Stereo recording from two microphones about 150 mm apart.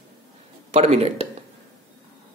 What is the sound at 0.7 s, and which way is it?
Speech, 40° right (ahead or behind).